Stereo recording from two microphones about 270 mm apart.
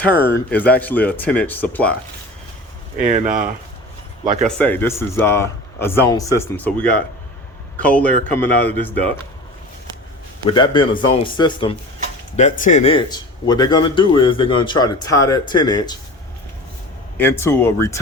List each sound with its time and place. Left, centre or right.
0.0 s speech: centre
4.4 s speech: centre
10.4 s speech: centre
17.2 s speech: centre